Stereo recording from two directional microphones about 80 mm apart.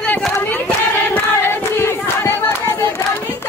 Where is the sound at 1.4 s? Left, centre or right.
Left.